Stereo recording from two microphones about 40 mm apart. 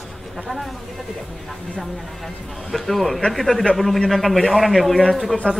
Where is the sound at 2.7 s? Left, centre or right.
Centre.